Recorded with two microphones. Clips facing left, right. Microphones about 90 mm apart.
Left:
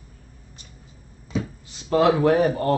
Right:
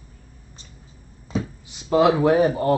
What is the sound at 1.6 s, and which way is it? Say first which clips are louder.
A man's voice: right 1 dB; 15° right (ahead or behind).